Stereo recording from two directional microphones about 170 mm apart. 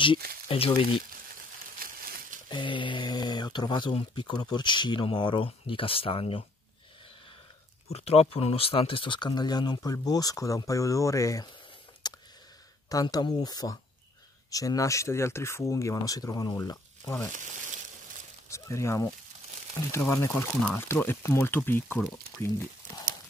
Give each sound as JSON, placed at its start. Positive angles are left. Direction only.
{"t": 0.5, "sound": "speech", "side_deg": 35}
{"t": 1.8, "sound": "a sound", "side_deg": -60}
{"t": 2.5, "sound": "speech", "side_deg": 30}
{"t": 7.9, "sound": "speech", "side_deg": 35}
{"t": 12.0, "sound": "a sound", "side_deg": 25}
{"t": 12.9, "sound": "speech", "side_deg": 25}
{"t": 18.5, "sound": "speech", "side_deg": 15}